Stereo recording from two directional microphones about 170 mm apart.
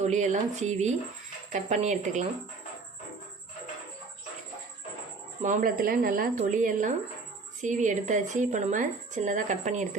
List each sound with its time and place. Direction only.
0.0 s a woman's voice: 45° right (ahead or behind)
5.4 s a woman's voice: 50° right (ahead or behind)